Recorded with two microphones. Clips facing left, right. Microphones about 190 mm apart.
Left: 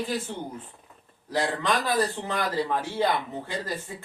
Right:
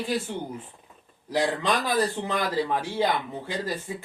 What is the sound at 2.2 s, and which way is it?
Speech, 15° right (ahead or behind).